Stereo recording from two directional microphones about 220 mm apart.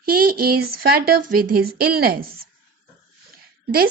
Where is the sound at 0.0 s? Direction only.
40° right (ahead or behind).